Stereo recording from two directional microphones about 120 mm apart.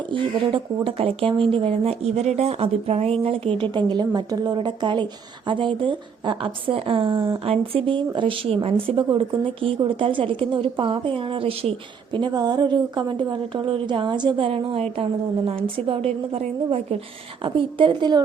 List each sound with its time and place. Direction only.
0.1 s speech: 45° right (ahead or behind)
12.1 s speech: 40° right (ahead or behind)
15.9 s a woman's voice: 55° right (ahead or behind)
17.4 s speech: 45° right (ahead or behind)